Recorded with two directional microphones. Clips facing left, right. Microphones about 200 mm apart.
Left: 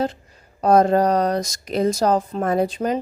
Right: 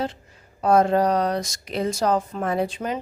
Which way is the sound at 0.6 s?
40° left (ahead or behind).